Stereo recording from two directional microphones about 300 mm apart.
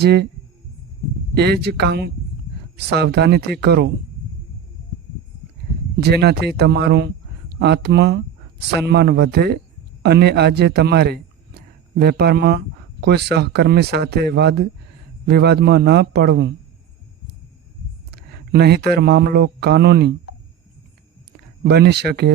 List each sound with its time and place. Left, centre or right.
0.0 s speech: right
1.4 s speech: right
6.0 s a man's voice: right
18.1 s speech: right
21.6 s speech: right